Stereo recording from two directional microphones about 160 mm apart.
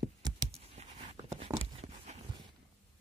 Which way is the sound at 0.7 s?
40° right (ahead or behind).